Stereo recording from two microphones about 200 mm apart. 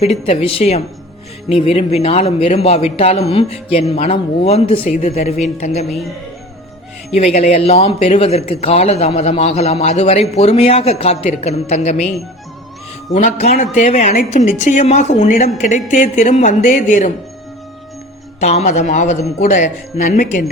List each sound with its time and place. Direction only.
0.0 s speech: 30° left (ahead or behind)
7.1 s speech: 30° left (ahead or behind)
18.3 s speech: 35° left (ahead or behind)